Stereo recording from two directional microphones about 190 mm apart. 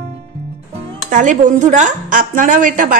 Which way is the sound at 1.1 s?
40° right (ahead or behind).